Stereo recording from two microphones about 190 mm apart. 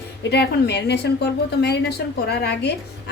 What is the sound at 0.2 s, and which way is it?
A woman's voice, 60° left (ahead or behind).